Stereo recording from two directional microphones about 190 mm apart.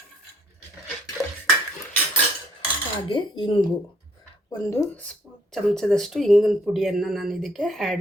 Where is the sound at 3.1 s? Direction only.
25° left (ahead or behind).